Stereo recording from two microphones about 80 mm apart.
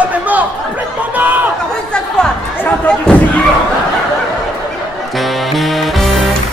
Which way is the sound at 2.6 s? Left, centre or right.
Centre.